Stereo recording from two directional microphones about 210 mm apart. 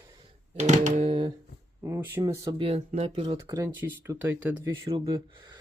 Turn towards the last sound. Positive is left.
turn(degrees=-15)  # may be behind; listen again after turning